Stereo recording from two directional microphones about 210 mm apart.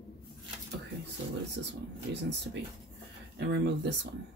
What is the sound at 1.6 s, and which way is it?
Speech, 60° right (ahead or behind).